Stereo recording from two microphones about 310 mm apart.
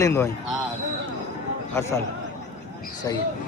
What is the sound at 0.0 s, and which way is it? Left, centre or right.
Speech, centre.